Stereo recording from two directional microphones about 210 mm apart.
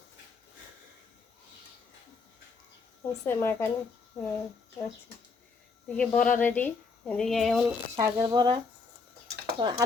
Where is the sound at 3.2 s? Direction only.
10° left (ahead or behind).